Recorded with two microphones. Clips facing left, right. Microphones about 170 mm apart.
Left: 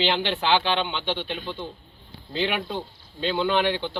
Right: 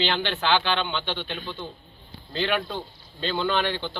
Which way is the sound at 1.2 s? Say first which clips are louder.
Left 2 dB; 5° left (ahead or behind).